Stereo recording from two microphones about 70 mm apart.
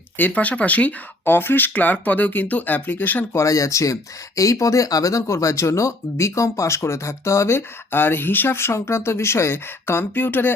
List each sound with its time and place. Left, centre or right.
0.2 s speech: left
3.3 s speech: left